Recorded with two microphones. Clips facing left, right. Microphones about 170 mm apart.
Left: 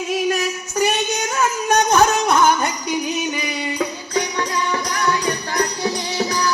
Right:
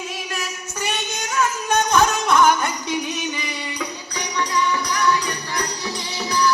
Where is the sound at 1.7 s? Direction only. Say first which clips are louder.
Left 3 dB; 45° left (ahead or behind).